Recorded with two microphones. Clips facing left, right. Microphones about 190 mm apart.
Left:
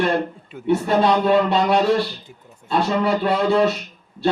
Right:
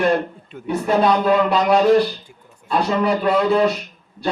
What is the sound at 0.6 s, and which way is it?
Speech, 30° left (ahead or behind).